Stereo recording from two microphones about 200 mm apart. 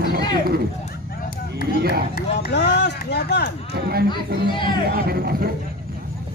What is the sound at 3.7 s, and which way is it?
Speech, 50° right (ahead or behind).